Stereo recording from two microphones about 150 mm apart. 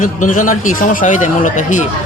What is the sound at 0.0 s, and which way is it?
A man's voice, 60° left (ahead or behind).